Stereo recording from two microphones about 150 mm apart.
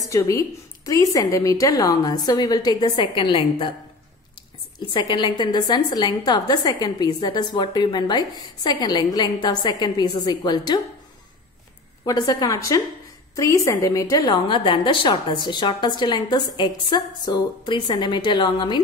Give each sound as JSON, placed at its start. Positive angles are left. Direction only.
{"t": 0.0, "sound": "a woman's voice", "side_deg": 20}
{"t": 4.7, "sound": "a woman's voice", "side_deg": 30}
{"t": 12.1, "sound": "a woman's voice", "side_deg": 25}